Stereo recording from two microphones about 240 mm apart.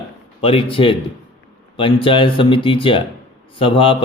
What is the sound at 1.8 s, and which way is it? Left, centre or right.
Speech, left.